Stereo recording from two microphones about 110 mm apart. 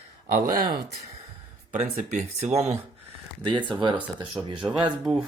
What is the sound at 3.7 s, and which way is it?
Speech, 45° right (ahead or behind).